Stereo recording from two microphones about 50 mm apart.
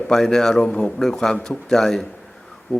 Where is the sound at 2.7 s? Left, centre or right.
Left.